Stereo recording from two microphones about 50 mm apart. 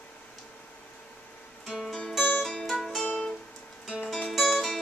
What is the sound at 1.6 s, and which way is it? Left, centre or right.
Music, centre.